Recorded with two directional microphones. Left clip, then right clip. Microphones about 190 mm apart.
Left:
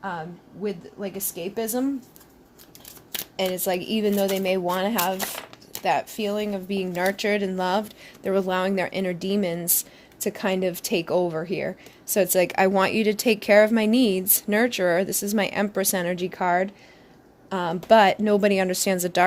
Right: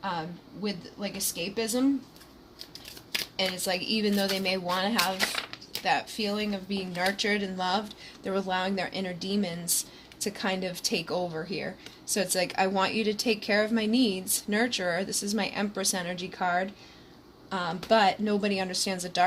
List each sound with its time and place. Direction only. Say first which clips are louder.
0.0 s speech: left 1 dB; 40° left (ahead or behind)
1.5 s speech: left 3 dB; 60° left (ahead or behind)
3.3 s speech: left 6 dB; 55° left (ahead or behind)